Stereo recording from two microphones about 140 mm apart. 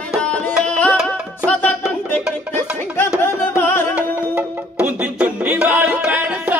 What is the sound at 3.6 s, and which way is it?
Music, 15° left (ahead or behind).